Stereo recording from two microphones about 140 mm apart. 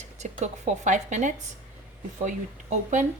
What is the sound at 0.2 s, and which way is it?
A woman's voice, 55° right (ahead or behind).